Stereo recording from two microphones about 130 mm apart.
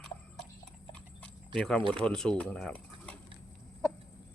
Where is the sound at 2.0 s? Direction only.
5° left (ahead or behind).